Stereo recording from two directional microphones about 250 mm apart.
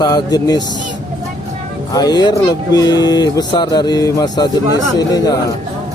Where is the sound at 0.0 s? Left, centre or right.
Centre.